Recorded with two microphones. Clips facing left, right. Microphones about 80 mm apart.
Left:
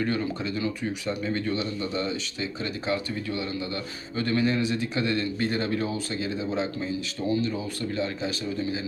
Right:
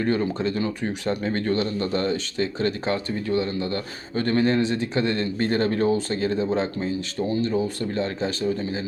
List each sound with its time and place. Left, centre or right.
0.0 s speech: right